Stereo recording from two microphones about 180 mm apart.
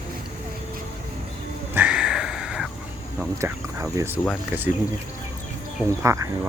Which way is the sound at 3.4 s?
15° right (ahead or behind).